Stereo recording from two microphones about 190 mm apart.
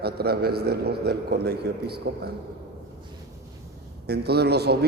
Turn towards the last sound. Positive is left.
turn(degrees=-60)  # may be behind; listen again after turning